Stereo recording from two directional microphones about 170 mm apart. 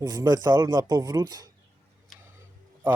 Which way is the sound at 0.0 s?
20° right (ahead or behind).